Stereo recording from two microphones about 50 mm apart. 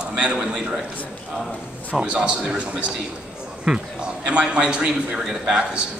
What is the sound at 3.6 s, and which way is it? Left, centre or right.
A man's voice, centre.